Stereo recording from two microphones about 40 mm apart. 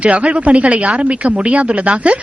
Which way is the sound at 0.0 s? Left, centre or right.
Right.